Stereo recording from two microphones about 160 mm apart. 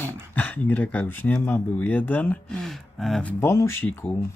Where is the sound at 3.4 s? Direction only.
15° left (ahead or behind).